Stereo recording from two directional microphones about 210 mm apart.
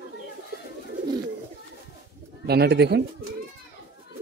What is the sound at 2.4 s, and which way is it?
Speech, 50° right (ahead or behind).